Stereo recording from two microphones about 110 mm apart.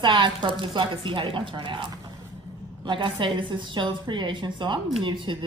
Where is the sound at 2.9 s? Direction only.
50° right (ahead or behind).